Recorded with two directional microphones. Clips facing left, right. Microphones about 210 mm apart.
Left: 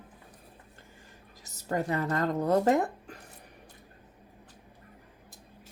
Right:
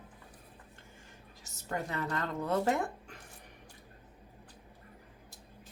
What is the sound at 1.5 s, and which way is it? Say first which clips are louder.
Speech: left 7 dB; 35° left (ahead or behind).